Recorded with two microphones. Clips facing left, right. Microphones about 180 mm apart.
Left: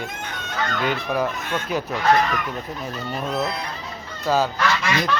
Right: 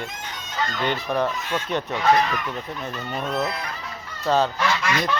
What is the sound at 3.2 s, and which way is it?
Speech, centre (ahead or behind).